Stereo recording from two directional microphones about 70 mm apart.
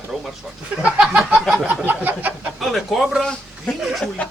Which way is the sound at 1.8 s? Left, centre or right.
Right.